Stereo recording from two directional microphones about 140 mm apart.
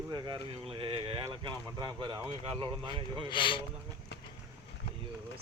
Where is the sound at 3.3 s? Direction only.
35° left (ahead or behind).